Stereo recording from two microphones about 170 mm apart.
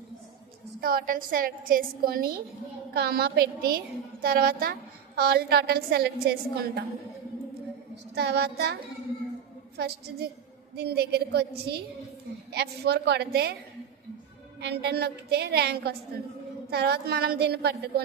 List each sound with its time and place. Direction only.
0.7 s a woman's voice: 60° right (ahead or behind)
8.1 s a woman's voice: 75° right (ahead or behind)
9.8 s a woman's voice: 70° right (ahead or behind)
14.6 s a woman's voice: 70° right (ahead or behind)